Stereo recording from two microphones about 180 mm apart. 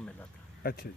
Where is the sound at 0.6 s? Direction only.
60° left (ahead or behind).